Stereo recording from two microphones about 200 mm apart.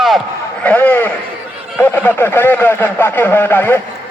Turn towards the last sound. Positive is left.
turn(degrees=10)  # may be behind; listen again after turning